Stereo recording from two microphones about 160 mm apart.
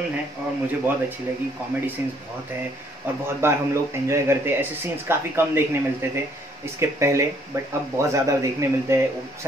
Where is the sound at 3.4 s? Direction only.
15° right (ahead or behind).